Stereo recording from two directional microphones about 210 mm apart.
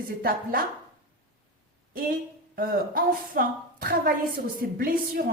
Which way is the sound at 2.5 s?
45° right (ahead or behind).